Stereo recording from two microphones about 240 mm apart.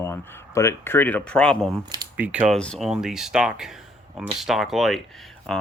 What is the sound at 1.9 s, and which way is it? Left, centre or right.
Speech, centre.